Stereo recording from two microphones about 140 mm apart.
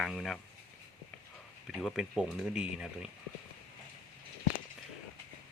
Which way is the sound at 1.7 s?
5° right (ahead or behind).